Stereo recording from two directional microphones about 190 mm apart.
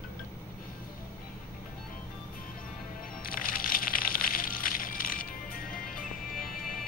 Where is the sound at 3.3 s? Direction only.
50° left (ahead or behind).